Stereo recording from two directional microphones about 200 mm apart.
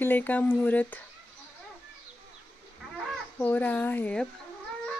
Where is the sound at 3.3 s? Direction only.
10° left (ahead or behind).